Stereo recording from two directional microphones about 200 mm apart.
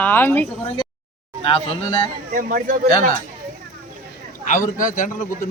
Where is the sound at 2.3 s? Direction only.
45° right (ahead or behind).